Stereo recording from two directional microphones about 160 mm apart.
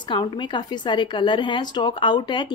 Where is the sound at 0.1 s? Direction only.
30° left (ahead or behind).